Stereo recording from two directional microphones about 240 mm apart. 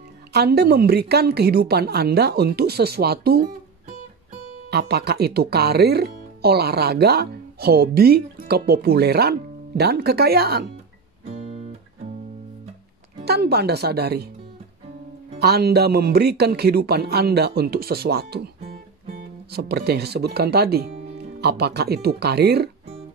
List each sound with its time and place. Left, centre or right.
0.3 s speech: right
4.6 s speech: right
13.2 s speech: right
15.3 s speech: right